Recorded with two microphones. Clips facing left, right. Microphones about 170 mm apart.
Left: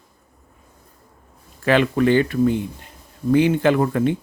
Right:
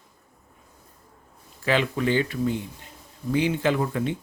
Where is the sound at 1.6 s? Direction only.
60° left (ahead or behind).